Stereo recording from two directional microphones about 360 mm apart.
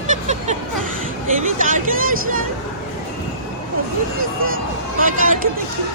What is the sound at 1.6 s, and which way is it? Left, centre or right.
Speech, right.